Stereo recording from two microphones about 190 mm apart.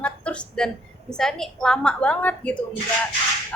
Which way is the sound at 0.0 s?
5° left (ahead or behind).